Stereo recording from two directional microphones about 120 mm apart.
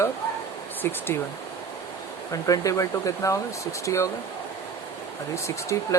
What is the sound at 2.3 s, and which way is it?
Speech, 30° left (ahead or behind).